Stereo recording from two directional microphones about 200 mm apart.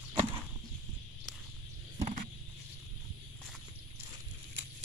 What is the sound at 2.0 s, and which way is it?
Wild animals, 35° right (ahead or behind).